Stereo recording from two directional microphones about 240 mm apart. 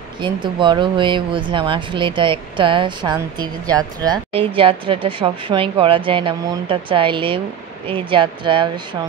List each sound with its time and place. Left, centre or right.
0.2 s speech: centre